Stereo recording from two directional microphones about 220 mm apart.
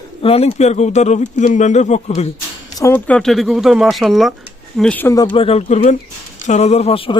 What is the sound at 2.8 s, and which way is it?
Speech, 10° left (ahead or behind).